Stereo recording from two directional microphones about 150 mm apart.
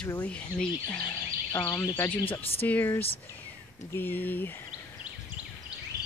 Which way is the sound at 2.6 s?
10° left (ahead or behind).